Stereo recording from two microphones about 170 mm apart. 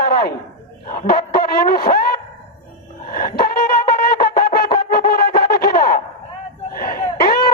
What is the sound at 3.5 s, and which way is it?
Wind instrument, 60° left (ahead or behind).